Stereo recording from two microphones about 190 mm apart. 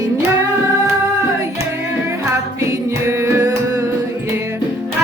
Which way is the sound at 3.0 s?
15° right (ahead or behind).